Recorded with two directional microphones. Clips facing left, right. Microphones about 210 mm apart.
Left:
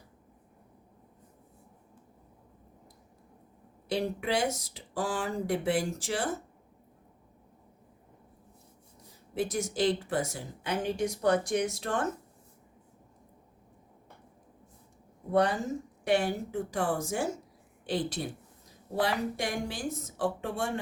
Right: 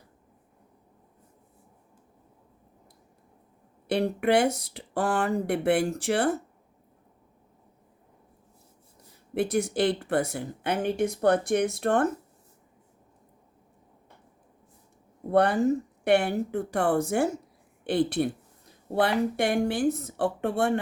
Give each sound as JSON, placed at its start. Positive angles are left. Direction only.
{"t": 3.8, "sound": "speech", "side_deg": -60}
{"t": 9.3, "sound": "speech", "side_deg": -60}
{"t": 15.3, "sound": "speech", "side_deg": -60}